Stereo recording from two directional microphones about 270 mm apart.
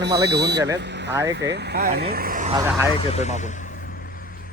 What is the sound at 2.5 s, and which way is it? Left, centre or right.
Speech, centre.